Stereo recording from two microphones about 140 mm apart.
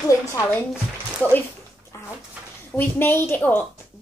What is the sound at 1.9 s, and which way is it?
Dishes, 25° left (ahead or behind).